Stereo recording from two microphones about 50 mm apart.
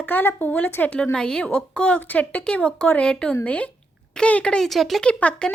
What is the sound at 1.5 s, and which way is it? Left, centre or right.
Speech, left.